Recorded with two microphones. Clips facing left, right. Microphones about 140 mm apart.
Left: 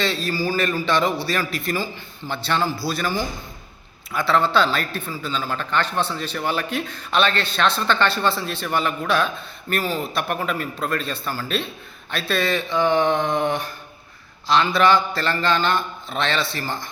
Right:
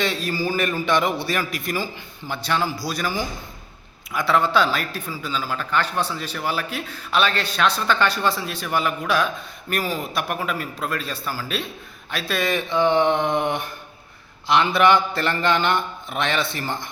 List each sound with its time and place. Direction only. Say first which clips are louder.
0.0 s a man's voice: left 1 dB; 15° right (ahead or behind)